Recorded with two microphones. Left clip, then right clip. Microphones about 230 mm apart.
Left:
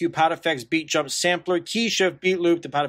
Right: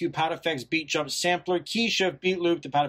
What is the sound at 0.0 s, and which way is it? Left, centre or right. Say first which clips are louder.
Speech: left 6 dB; centre.